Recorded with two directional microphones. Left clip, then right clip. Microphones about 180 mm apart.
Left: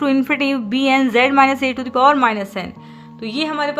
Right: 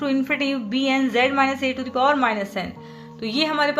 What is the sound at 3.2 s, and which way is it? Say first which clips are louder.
Speech: even; 10° left (ahead or behind).